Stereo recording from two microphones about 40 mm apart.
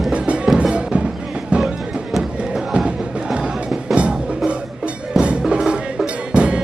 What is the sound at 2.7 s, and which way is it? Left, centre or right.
Music, right.